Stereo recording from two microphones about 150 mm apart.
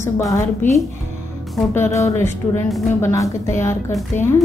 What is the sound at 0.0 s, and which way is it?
A woman's voice, 20° left (ahead or behind).